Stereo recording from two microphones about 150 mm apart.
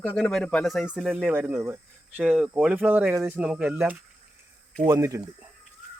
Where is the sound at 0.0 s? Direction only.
5° left (ahead or behind).